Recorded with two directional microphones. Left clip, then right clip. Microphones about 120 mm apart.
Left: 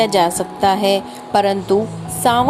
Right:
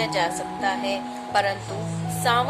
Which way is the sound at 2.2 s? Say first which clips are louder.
Left 7 dB; 50° left (ahead or behind).